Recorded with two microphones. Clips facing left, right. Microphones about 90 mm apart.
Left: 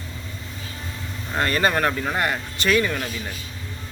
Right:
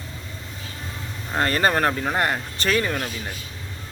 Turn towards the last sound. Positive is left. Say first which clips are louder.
# left 2 dB
turn(degrees=-35)  # may be behind; listen again after turning